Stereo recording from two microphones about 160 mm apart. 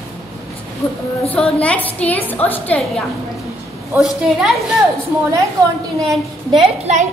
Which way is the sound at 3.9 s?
Centre (ahead or behind).